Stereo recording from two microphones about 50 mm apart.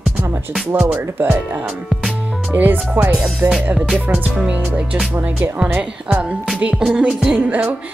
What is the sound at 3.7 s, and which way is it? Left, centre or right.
Speech, right.